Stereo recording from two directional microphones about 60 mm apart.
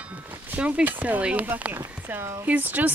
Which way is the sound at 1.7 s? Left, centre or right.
Right.